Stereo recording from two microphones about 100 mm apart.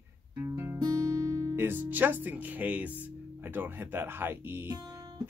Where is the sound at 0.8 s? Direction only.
35° right (ahead or behind).